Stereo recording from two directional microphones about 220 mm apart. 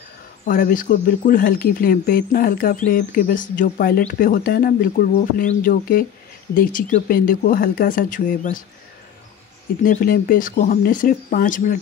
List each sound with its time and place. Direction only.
0.5 s speech: 40° left (ahead or behind)
9.8 s speech: 40° left (ahead or behind)